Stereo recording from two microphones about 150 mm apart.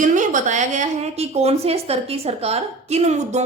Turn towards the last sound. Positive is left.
turn(degrees=-50)  # may be behind; listen again after turning